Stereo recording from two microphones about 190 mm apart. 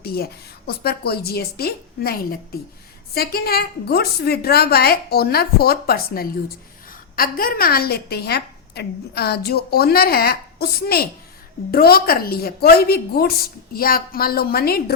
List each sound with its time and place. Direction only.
0.0 s a woman's voice: 55° left (ahead or behind)